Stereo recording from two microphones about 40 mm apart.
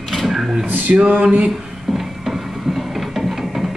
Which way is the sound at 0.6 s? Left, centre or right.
Right.